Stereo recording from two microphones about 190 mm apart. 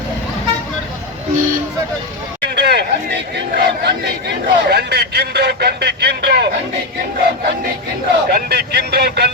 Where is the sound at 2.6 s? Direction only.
60° right (ahead or behind).